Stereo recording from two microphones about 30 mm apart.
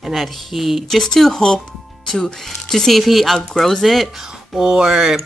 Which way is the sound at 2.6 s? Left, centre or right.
Centre.